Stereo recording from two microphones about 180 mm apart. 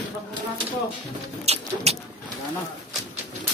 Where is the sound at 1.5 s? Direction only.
35° right (ahead or behind).